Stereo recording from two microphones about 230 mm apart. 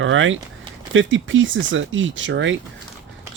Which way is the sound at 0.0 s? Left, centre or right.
Right.